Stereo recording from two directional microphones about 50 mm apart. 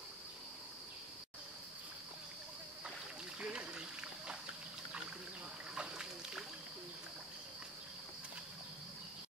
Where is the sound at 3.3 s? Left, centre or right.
Centre.